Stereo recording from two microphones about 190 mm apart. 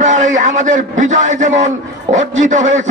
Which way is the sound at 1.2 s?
40° right (ahead or behind).